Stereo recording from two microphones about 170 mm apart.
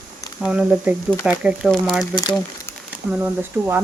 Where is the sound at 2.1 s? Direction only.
25° left (ahead or behind).